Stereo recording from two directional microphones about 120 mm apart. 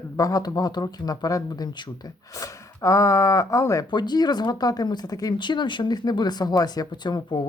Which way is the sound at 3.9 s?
35° left (ahead or behind).